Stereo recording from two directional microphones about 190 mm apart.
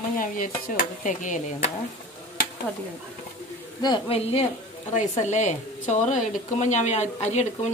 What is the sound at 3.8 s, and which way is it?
Speech, 25° left (ahead or behind).